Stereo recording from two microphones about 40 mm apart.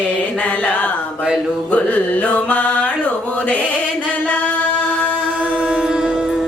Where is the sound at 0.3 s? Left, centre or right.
Left.